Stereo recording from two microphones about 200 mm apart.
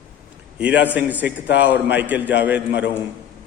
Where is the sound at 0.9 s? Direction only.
10° right (ahead or behind).